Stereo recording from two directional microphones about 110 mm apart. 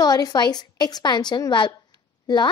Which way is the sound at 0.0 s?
35° left (ahead or behind).